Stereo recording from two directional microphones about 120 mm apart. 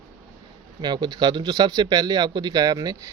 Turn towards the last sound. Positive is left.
turn(degrees=-30)  # may be behind; listen again after turning